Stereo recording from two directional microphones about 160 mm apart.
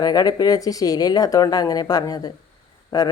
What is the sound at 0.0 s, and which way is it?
A woman's voice, 25° left (ahead or behind).